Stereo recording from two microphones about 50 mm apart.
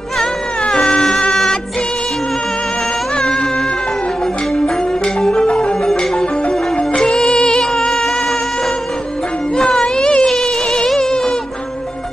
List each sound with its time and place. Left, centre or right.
0.2 s music: centre
4.6 s music: centre
9.6 s music: centre